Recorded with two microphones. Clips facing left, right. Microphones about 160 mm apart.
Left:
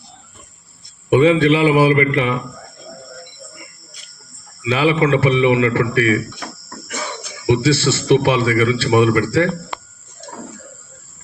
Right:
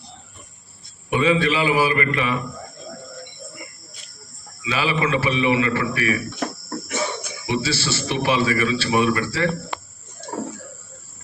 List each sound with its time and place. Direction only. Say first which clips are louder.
1.1 s a man's voice: left 7 dB; 60° left (ahead or behind)
4.6 s a man's voice: left 7 dB; 60° left (ahead or behind)
7.4 s a man's voice: left 9 dB; 60° left (ahead or behind)